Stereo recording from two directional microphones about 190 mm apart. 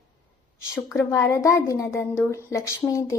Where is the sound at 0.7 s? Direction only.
15° left (ahead or behind).